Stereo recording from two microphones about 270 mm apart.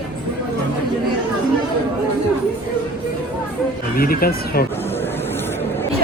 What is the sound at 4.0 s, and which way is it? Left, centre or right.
Speech, left.